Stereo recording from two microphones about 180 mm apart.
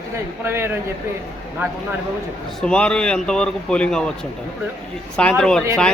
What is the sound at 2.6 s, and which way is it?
A man's voice, 5° left (ahead or behind).